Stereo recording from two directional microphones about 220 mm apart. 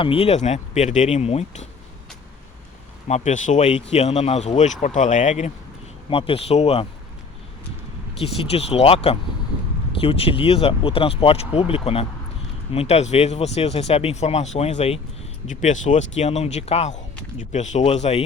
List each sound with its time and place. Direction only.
0.0 s speech: 25° left (ahead or behind)
3.1 s speech: 35° left (ahead or behind)
8.2 s speech: 25° left (ahead or behind)